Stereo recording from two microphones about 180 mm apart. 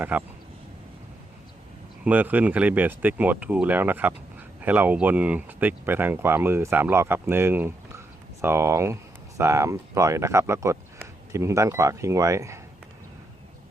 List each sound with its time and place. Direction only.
0.0 s speech: 10° right (ahead or behind)
2.0 s speech: 10° right (ahead or behind)